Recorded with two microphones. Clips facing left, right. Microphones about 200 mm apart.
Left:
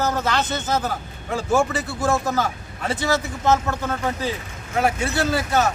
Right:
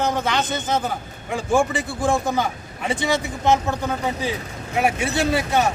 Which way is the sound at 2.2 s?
5° left (ahead or behind).